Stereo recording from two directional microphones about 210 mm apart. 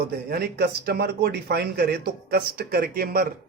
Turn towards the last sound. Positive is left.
turn(degrees=-45)  # may be behind; listen again after turning